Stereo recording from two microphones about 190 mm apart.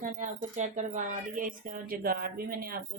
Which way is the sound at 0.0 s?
40° right (ahead or behind).